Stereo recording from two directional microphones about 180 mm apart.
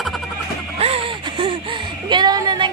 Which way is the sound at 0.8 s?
30° right (ahead or behind).